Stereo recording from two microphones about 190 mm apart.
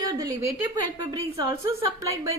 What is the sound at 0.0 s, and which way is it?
A woman's voice, 20° right (ahead or behind).